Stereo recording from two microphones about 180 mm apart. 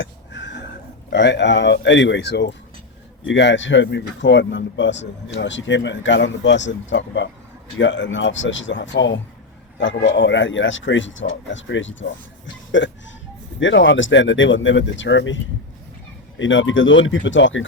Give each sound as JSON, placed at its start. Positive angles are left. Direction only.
{"t": 1.1, "sound": "speech", "side_deg": 75}
{"t": 16.4, "sound": "speech", "side_deg": 90}